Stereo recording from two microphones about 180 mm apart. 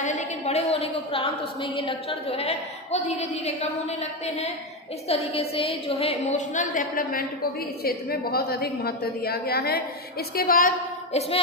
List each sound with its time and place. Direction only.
0.0 s a woman's voice: 40° left (ahead or behind)